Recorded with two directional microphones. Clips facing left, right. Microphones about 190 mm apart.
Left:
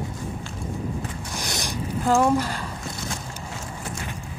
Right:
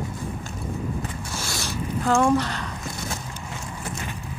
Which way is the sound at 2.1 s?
5° left (ahead or behind).